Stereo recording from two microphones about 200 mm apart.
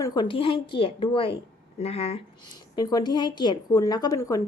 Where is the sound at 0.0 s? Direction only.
20° left (ahead or behind).